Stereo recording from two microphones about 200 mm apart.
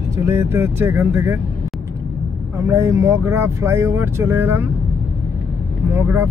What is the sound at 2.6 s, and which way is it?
Speech, 15° right (ahead or behind).